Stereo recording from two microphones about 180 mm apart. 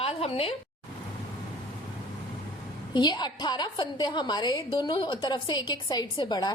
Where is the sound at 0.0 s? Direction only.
35° left (ahead or behind).